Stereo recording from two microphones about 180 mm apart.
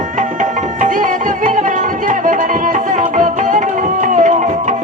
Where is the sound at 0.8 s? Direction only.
45° right (ahead or behind).